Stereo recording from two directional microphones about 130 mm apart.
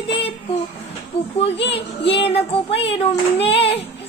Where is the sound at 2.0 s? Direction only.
45° left (ahead or behind).